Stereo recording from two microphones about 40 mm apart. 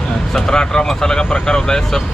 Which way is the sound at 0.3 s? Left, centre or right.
Centre.